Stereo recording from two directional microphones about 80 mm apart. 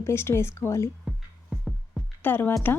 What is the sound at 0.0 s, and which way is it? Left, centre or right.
Speech, left.